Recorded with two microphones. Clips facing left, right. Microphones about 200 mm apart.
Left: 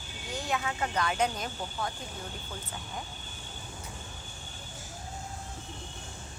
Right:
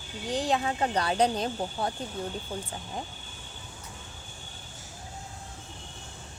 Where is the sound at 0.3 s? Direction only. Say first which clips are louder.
Right 6 dB; 35° right (ahead or behind).